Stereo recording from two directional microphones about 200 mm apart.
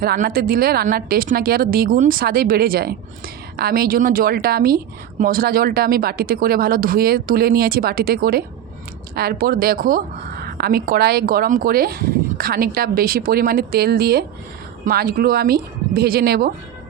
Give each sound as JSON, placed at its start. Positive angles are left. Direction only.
{"t": 0.0, "sound": "speech", "side_deg": -50}